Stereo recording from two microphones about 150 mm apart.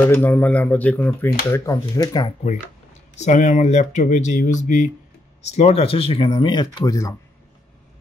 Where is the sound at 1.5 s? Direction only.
20° left (ahead or behind).